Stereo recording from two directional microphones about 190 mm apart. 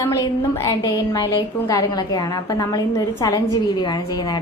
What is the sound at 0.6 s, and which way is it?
A woman's voice, 20° left (ahead or behind).